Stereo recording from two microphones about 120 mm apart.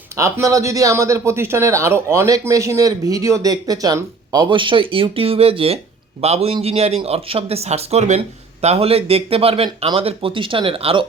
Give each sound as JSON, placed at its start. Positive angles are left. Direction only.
{"t": 0.2, "sound": "speech", "side_deg": -25}
{"t": 4.4, "sound": "speech", "side_deg": -45}
{"t": 8.6, "sound": "speech", "side_deg": -60}